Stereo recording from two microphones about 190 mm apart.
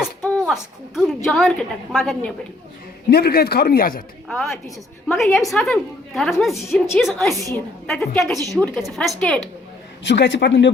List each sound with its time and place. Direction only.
0.0 s a woman's voice: centre (ahead or behind)
3.1 s a man's voice: 55° left (ahead or behind)
4.3 s a woman's voice: 5° left (ahead or behind)
10.0 s a man's voice: 70° left (ahead or behind)